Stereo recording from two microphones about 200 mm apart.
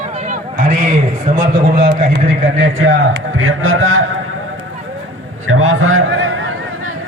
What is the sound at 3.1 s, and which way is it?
Speech, 85° right.